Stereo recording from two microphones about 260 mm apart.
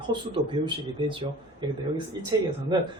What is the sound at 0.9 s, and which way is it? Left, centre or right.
Speech, centre.